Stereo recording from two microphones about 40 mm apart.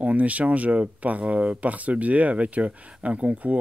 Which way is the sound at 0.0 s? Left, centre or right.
Right.